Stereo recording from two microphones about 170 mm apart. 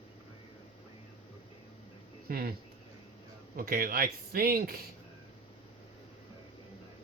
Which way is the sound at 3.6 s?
60° right (ahead or behind).